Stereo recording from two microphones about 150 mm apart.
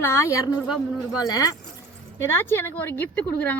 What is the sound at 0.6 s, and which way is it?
Speech, 5° right (ahead or behind).